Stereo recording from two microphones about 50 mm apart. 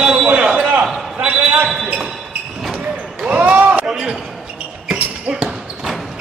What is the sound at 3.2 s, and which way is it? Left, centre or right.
Basketball bounce, right.